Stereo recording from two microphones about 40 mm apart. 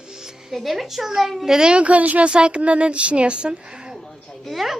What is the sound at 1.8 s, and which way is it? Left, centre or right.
Speech, right.